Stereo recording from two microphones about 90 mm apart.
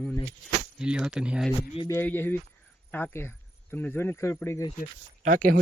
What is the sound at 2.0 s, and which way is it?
Speech, 20° left (ahead or behind).